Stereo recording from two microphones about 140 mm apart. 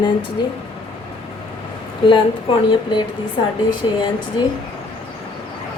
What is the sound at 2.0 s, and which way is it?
A woman's voice, 35° left (ahead or behind).